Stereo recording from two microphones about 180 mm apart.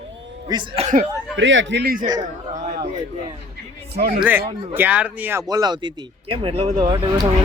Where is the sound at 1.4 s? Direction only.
90° right; by 2.0 s 60° right (ahead or behind).